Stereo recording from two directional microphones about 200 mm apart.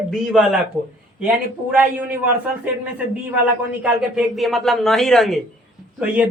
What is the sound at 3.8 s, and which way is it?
A man's voice, centre (ahead or behind).